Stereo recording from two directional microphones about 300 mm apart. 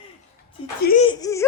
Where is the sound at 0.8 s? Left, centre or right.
Left.